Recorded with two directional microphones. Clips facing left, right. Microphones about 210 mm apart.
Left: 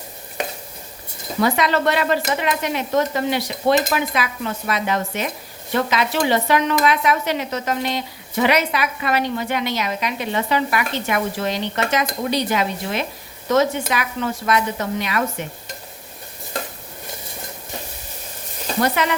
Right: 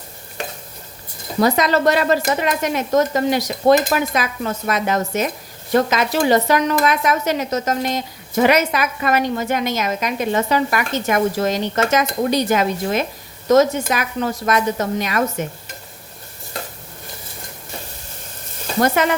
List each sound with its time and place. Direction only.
1.4 s speech: 40° right (ahead or behind)
18.8 s speech: 45° right (ahead or behind)